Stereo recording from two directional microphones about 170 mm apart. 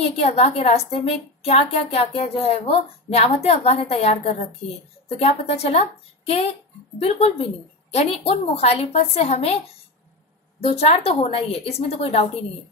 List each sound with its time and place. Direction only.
0.2 s a woman's voice: 35° left (ahead or behind)
10.6 s a woman's voice: 35° left (ahead or behind)